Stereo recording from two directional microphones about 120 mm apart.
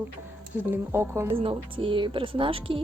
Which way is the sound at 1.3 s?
50° right (ahead or behind).